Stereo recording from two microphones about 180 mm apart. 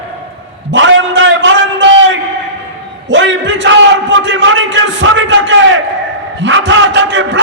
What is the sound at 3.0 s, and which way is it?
A man's voice, 90° right.